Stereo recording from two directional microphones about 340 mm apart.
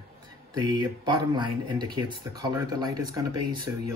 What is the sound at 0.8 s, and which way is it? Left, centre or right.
Speech, centre.